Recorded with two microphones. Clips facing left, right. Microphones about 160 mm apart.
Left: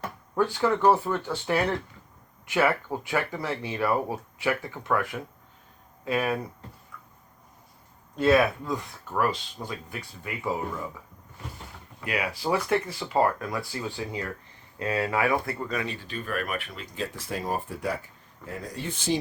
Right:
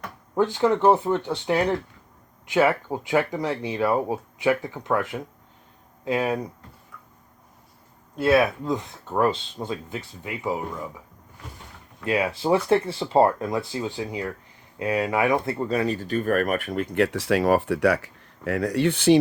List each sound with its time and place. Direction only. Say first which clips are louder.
0.3 s speech: right 4 dB; 20° right (ahead or behind)
8.1 s speech: right 1 dB; 10° right (ahead or behind)
12.0 s speech: right 6 dB; 25° right (ahead or behind); by 19.2 s 70° right (ahead or behind)